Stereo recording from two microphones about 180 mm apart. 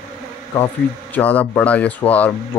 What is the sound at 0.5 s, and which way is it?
Speech, 10° left (ahead or behind).